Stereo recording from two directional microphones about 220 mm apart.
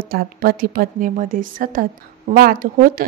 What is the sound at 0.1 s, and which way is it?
A woman's voice, 40° right (ahead or behind).